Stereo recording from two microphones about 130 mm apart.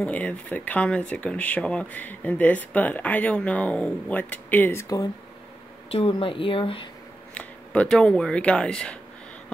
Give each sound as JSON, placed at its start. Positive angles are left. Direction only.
{"t": 0.0, "sound": "speech", "side_deg": 10}
{"t": 4.8, "sound": "speech", "side_deg": 30}
{"t": 5.9, "sound": "speech", "side_deg": 45}
{"t": 7.3, "sound": "speech", "side_deg": 10}